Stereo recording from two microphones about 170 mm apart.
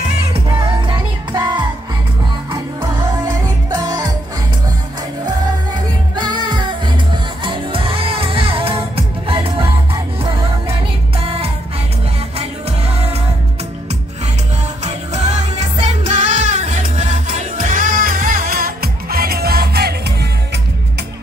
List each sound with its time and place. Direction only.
0.5 s music: 30° right (ahead or behind)
3.7 s music: 20° right (ahead or behind)
6.1 s music: 25° right (ahead or behind)
11.1 s music: 35° right (ahead or behind)
14.9 s music: 40° right (ahead or behind); by 20.0 s 70° right (ahead or behind)